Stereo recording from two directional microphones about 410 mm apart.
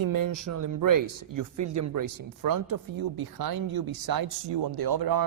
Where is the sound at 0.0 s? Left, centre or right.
Right.